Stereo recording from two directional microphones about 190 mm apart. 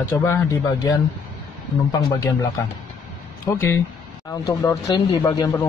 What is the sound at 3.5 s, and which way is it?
Speech, 15° left (ahead or behind).